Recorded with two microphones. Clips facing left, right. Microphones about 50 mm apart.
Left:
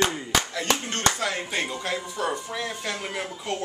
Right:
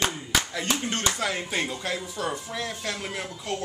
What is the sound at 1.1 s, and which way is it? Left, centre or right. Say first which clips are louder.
A man's voice: even; centre.